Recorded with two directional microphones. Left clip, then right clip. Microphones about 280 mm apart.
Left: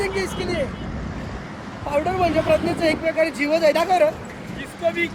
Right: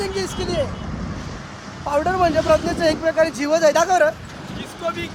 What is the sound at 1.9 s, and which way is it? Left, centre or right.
Speech, centre.